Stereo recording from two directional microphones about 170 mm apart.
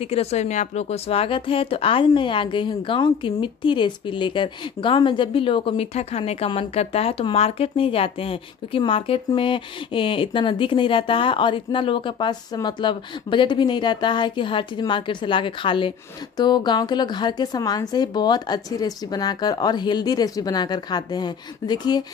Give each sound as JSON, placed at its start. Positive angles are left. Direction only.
{"t": 0.0, "sound": "speech", "side_deg": 35}